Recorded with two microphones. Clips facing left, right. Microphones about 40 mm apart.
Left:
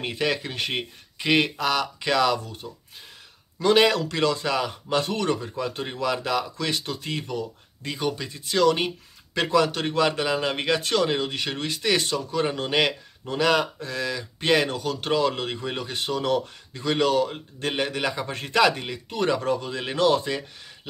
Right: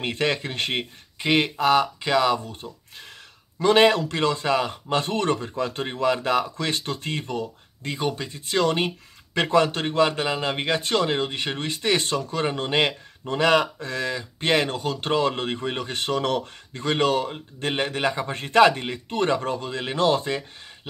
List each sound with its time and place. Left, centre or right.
0.0 s speech: right
2.0 s speech: right
3.5 s speech: right